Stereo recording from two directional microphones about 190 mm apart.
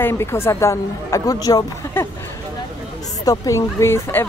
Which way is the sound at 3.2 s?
15° left (ahead or behind).